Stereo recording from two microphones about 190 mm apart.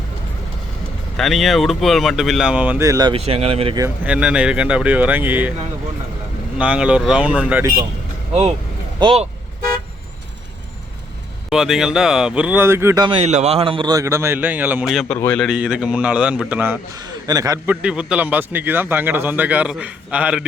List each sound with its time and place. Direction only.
1.1 s speech: centre (ahead or behind); by 3.8 s 30° right (ahead or behind)
3.8 s speech: 10° right (ahead or behind)
6.6 s speech: 5° right (ahead or behind)
8.3 s speech: 35° right (ahead or behind)
11.4 s speech: centre (ahead or behind)
13.1 s speech: 35° right (ahead or behind); by 15.4 s 5° left (ahead or behind)
15.4 s speech: 5° right (ahead or behind)
17.8 s speech: 5° right (ahead or behind)